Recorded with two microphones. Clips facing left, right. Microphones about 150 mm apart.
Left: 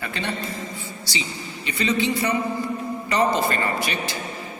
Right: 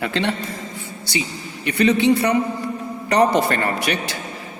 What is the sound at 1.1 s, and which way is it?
A man's voice, 60° right (ahead or behind).